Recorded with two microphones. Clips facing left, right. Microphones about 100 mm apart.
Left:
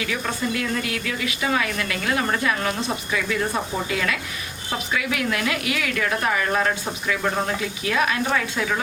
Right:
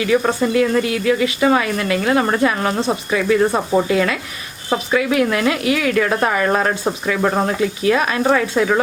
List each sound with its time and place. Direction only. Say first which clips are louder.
0.1 s speech: right 10 dB; 30° right (ahead or behind)